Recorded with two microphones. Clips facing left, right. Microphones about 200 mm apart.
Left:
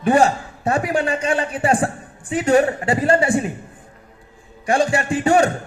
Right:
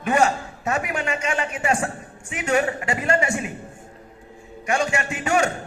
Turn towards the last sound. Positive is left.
turn(degrees=35)  # may be behind; listen again after turning